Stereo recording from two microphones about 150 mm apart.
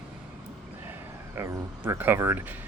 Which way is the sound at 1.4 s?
15° right (ahead or behind).